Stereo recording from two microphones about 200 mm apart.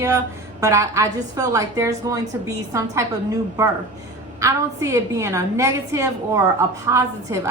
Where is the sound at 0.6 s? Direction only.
15° right (ahead or behind).